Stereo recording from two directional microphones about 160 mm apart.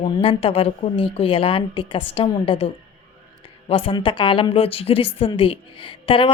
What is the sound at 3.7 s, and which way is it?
Speech, 35° left (ahead or behind).